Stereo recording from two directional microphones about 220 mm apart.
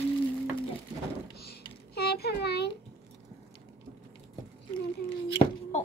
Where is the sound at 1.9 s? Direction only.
45° left (ahead or behind).